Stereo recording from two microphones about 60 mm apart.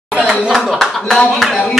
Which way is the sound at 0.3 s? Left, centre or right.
Centre.